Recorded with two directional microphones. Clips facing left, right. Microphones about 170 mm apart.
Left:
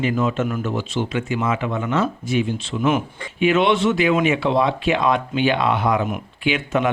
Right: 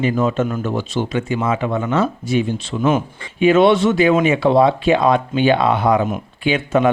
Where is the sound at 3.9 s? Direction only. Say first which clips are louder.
Right 4 dB; 35° right (ahead or behind).